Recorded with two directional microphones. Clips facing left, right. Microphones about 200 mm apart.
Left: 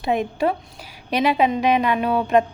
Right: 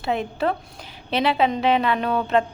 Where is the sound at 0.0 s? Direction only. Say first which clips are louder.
Left 3 dB; 15° left (ahead or behind).